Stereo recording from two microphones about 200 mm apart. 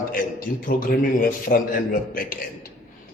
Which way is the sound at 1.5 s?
45° left (ahead or behind).